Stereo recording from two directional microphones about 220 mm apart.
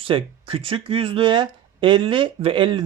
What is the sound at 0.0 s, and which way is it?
Speech, 25° right (ahead or behind).